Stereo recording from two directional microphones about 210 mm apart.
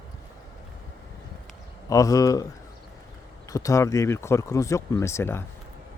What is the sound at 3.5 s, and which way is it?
Speech, 15° left (ahead or behind).